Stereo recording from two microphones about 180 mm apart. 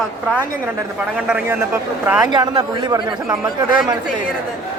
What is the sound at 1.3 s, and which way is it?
Speech, 10° right (ahead or behind).